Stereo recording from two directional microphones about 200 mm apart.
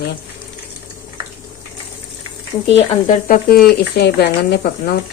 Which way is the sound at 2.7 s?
40° left (ahead or behind).